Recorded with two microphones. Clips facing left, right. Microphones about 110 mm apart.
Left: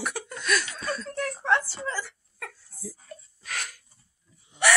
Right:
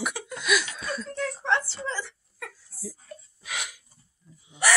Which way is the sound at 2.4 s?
5° right (ahead or behind).